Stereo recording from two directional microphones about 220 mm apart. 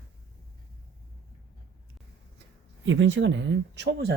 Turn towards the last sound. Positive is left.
turn(degrees=-50)  # may be behind; listen again after turning